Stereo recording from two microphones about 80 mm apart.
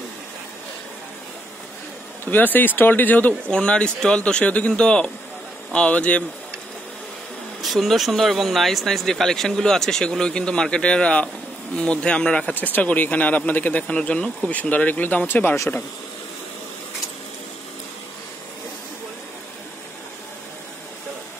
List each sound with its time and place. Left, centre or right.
2.3 s speech: left
7.6 s speech: centre; by 15.5 s left